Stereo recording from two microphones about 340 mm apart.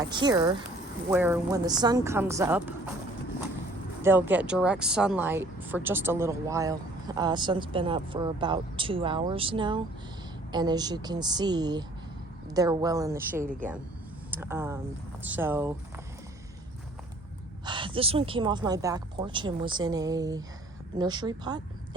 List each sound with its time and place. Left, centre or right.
0.0 s speech: centre
4.0 s speech: centre
13.3 s speech: right
14.3 s speech: centre
17.7 s speech: centre